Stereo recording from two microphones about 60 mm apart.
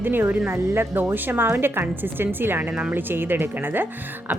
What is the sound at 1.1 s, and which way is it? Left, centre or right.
A woman's voice, right.